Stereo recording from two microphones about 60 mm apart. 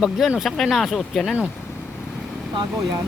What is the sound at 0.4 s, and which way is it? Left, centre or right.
Speech, centre.